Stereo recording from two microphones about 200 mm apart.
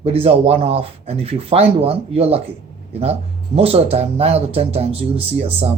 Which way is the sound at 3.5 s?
30° right (ahead or behind).